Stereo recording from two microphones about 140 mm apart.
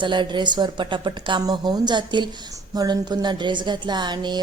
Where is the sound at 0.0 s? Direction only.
35° right (ahead or behind).